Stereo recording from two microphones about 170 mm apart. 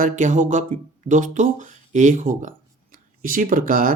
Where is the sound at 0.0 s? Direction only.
50° right (ahead or behind).